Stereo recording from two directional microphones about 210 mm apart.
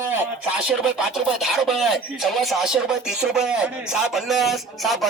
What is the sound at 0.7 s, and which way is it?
Speech, centre (ahead or behind).